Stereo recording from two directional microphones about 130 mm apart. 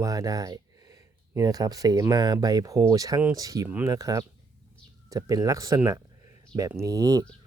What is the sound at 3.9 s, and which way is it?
Speech, 30° right (ahead or behind).